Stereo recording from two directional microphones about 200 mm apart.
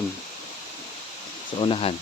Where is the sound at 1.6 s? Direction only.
25° left (ahead or behind).